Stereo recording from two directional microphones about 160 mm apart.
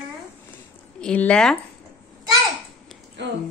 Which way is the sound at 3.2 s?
90° right.